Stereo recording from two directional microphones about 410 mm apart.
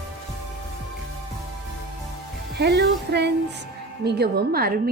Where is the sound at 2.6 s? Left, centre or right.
Right.